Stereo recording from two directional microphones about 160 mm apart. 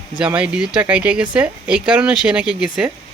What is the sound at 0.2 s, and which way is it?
Speech, 5° right (ahead or behind).